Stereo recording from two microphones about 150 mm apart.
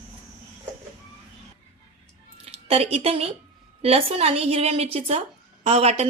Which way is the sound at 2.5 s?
40° right (ahead or behind).